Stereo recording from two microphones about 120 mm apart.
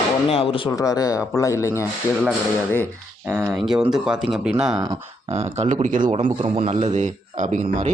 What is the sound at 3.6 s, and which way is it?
Speech, 5° right (ahead or behind).